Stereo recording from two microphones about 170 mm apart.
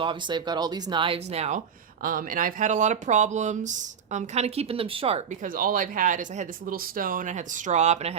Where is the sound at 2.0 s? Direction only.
55° right (ahead or behind).